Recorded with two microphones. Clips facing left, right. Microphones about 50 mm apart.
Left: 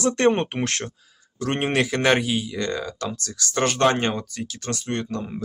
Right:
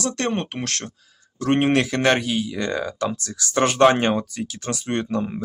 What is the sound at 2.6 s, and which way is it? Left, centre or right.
Speech, centre.